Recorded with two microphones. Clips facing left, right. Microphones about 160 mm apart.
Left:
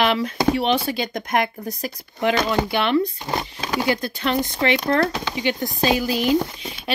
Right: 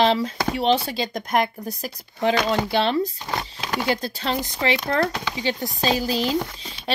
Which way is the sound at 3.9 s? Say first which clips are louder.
Left 2 dB; 30° right (ahead or behind).